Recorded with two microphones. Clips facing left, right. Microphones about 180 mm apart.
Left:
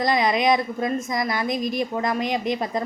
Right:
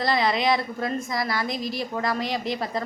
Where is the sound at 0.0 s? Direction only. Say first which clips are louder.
Left 2 dB; 20° left (ahead or behind).